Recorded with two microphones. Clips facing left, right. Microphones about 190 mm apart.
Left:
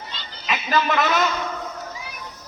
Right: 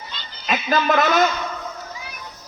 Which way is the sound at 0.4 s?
40° right (ahead or behind).